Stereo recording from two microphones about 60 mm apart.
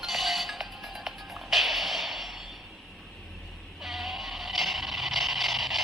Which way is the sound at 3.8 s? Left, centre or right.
Centre.